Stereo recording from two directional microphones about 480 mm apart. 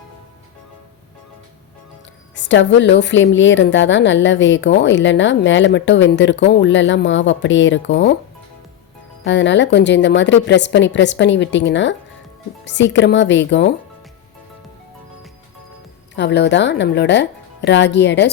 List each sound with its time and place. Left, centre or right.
2.3 s a woman's voice: left
9.2 s a woman's voice: left
16.1 s a woman's voice: left